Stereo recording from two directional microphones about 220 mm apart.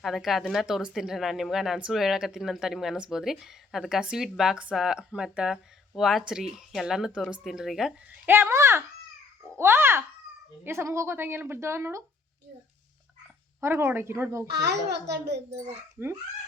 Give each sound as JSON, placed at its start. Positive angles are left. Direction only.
{"t": 0.0, "sound": "a woman's voice", "side_deg": 0}
{"t": 13.6, "sound": "speech", "side_deg": -10}
{"t": 14.5, "sound": "a child's voice", "side_deg": -50}
{"t": 16.0, "sound": "speech", "side_deg": -10}